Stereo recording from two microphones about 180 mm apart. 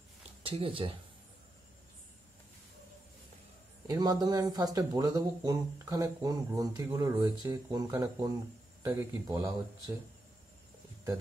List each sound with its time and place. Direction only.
0.4 s speech: 30° right (ahead or behind)
3.8 s speech: 20° right (ahead or behind)